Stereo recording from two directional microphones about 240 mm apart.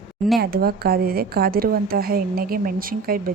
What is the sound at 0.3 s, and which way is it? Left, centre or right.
Speech, right.